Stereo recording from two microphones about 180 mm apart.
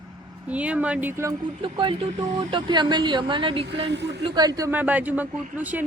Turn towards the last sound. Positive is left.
turn(degrees=-10)  # may be behind; listen again after turning